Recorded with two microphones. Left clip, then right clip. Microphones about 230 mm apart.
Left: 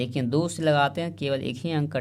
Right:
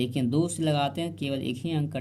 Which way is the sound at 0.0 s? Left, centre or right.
Left.